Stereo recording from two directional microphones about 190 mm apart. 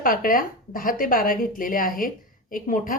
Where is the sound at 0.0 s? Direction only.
45° left (ahead or behind).